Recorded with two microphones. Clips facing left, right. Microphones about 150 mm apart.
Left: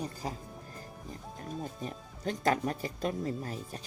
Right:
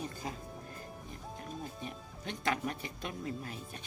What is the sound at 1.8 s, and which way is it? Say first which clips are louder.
Speech: left 6 dB; 40° left (ahead or behind).